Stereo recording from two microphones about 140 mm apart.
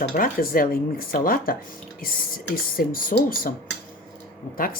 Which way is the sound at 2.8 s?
90° left.